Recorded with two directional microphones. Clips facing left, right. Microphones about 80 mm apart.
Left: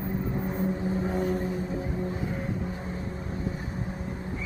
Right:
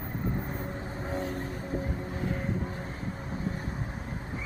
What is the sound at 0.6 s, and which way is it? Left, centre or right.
Vehicle, centre.